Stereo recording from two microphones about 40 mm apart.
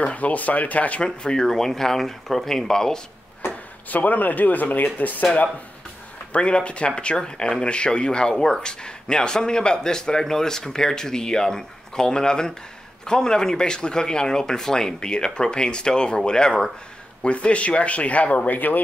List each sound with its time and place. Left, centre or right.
0.0 s speech: left
1.0 s speech: left
1.4 s speech: centre
3.9 s speech: left
6.3 s speech: left
17.2 s speech: left